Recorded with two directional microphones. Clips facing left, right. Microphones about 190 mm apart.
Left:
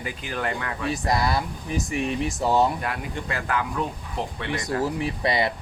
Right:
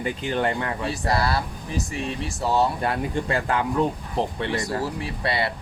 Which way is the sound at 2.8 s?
30° right (ahead or behind).